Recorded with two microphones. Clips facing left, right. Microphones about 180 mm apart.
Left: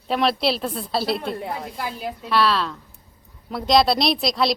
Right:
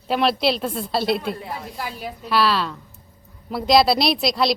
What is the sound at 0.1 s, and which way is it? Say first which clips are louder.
Speech: right 1 dB; centre (ahead or behind).